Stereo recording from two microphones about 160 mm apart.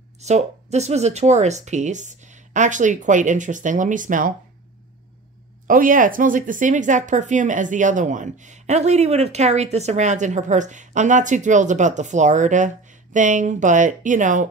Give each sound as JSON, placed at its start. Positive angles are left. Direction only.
{"t": 0.2, "sound": "speech", "side_deg": -45}
{"t": 5.7, "sound": "speech", "side_deg": -60}